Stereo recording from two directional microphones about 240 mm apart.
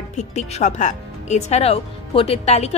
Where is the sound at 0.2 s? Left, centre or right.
Left.